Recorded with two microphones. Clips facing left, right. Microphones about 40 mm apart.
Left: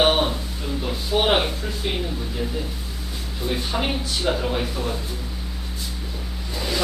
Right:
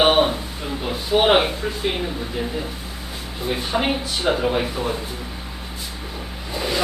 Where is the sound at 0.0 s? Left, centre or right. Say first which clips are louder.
Right 3 dB; centre.